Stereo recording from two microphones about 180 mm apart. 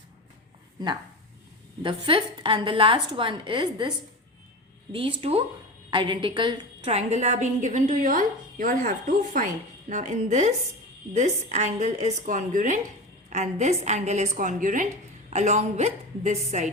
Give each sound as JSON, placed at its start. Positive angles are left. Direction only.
{"t": 1.8, "sound": "a woman's voice", "side_deg": -30}
{"t": 6.8, "sound": "a woman's voice", "side_deg": -35}
{"t": 9.9, "sound": "a woman's voice", "side_deg": -40}